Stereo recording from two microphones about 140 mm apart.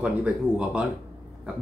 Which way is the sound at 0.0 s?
5° right (ahead or behind).